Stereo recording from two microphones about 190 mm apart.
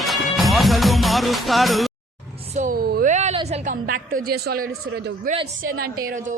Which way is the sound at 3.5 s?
45° right (ahead or behind).